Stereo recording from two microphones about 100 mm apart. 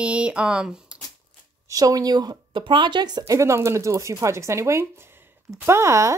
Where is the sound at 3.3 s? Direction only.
30° right (ahead or behind).